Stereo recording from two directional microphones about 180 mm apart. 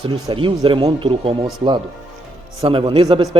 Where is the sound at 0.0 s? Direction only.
30° right (ahead or behind).